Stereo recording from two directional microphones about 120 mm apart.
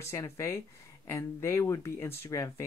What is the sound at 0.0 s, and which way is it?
Speech, 25° left (ahead or behind).